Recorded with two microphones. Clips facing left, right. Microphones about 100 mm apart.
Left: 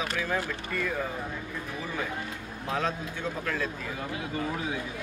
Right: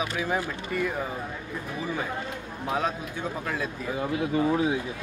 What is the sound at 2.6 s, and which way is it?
Speech, 15° right (ahead or behind).